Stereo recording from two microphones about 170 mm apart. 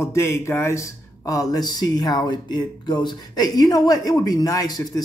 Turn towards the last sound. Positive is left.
turn(degrees=20)  # may be behind; listen again after turning